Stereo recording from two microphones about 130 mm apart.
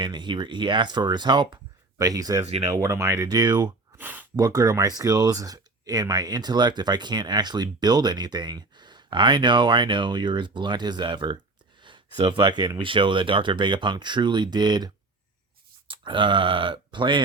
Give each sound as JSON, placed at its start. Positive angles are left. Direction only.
{"t": 0.0, "sound": "speech", "side_deg": -35}
{"t": 3.9, "sound": "a sound", "side_deg": -15}
{"t": 4.4, "sound": "speech", "side_deg": -30}